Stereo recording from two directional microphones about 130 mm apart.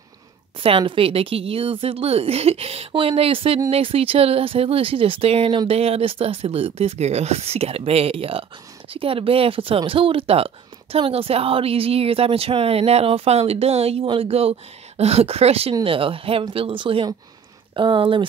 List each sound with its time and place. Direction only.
0.6 s speech: 45° right (ahead or behind)